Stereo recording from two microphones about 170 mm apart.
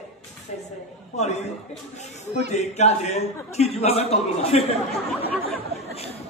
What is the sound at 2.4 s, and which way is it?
A man's voice, 40° left (ahead or behind).